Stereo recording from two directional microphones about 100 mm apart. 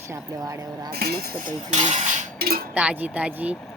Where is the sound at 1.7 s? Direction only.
90° right.